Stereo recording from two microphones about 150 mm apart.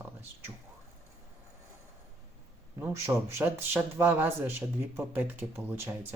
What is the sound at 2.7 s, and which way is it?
Speech, 15° right (ahead or behind).